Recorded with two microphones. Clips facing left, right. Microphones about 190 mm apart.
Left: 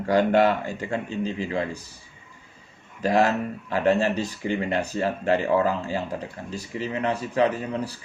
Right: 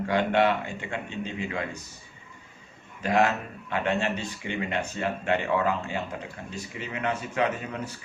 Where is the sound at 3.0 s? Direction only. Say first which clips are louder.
Left 3 dB; 35° left (ahead or behind).